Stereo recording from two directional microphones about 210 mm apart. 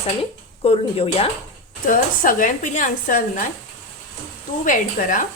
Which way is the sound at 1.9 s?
40° left (ahead or behind).